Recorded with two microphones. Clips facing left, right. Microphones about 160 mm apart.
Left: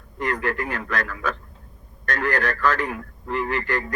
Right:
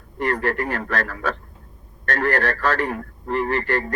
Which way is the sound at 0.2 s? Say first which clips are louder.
Right 3 dB; 35° right (ahead or behind).